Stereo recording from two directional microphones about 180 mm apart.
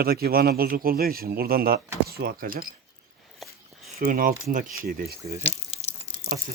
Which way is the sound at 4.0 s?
50° right (ahead or behind).